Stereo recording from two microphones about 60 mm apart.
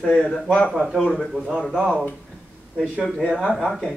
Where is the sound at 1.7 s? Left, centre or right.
Centre.